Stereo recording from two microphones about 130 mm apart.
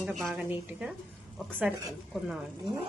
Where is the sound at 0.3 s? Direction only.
10° right (ahead or behind).